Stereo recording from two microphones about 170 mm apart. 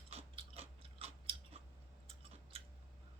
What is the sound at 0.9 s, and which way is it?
Chewing, 35° right (ahead or behind).